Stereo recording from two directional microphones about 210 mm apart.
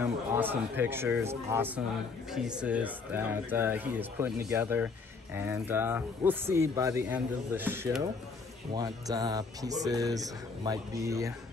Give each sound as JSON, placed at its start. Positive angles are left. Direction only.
{"t": 0.0, "sound": "speech", "side_deg": -10}